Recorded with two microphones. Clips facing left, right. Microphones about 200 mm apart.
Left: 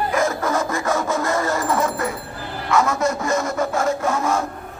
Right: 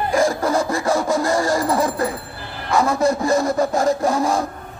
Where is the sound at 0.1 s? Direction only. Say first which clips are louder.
Right 6 dB; 30° right (ahead or behind).